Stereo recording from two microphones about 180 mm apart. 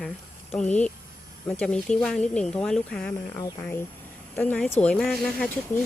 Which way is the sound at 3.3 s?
15° left (ahead or behind).